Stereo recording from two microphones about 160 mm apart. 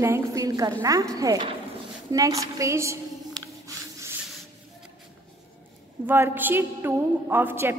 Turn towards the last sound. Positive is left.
turn(degrees=-15)  # may be behind; listen again after turning